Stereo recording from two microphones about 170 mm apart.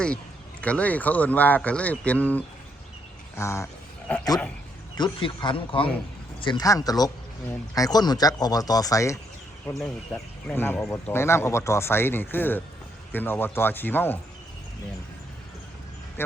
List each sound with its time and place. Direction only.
0.6 s speech: 10° left (ahead or behind)
4.9 s speech: 25° left (ahead or behind)
9.8 s speech: 5° left (ahead or behind)